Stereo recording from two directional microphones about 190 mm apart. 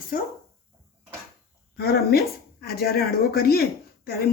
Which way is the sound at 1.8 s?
55° left (ahead or behind).